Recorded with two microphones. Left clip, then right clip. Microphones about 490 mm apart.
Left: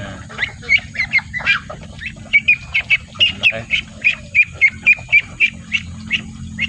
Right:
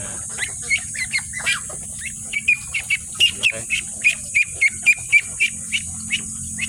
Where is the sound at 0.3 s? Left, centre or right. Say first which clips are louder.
Left 7 dB; right.